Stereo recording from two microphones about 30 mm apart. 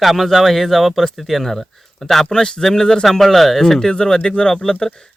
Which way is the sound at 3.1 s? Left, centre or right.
Centre.